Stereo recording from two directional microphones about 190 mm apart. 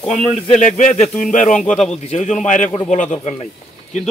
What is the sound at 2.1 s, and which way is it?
Speech, 40° left (ahead or behind).